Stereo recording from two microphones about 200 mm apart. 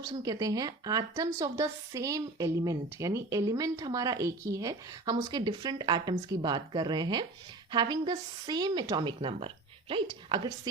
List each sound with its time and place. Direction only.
0.0 s a woman's voice: 20° right (ahead or behind)